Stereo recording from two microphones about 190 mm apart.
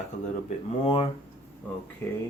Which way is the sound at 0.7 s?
25° left (ahead or behind).